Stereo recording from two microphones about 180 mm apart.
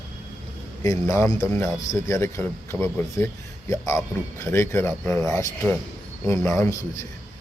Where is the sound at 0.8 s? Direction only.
15° left (ahead or behind).